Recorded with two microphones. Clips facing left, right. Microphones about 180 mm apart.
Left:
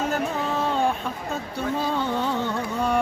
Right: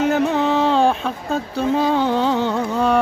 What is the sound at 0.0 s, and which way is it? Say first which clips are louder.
Music: right 8 dB; 75° right (ahead or behind).